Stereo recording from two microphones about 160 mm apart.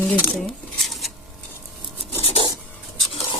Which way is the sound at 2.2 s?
35° left (ahead or behind).